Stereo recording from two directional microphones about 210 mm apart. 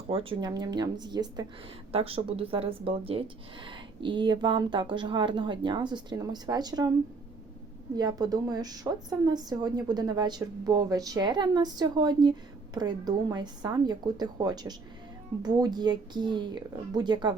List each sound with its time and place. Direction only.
0.1 s a woman's voice: 25° right (ahead or behind)
7.9 s a woman's voice: 20° right (ahead or behind)